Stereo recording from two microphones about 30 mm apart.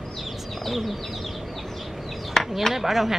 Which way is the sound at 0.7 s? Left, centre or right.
Centre.